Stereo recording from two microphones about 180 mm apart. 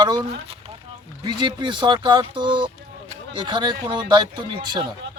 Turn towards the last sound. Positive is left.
turn(degrees=-25)  # may be behind; listen again after turning